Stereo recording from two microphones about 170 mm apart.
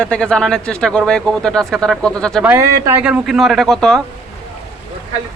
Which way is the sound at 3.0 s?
5° right (ahead or behind).